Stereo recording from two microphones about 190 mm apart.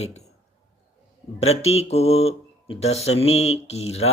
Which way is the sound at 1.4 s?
35° left (ahead or behind).